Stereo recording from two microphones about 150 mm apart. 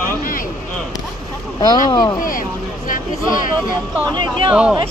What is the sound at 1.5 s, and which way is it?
Speech, 25° left (ahead or behind).